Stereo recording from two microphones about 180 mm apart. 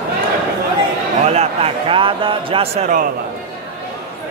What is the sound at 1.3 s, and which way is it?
Speech, 35° right (ahead or behind).